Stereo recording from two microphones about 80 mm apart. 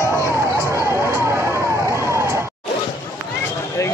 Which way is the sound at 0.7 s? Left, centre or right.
Right.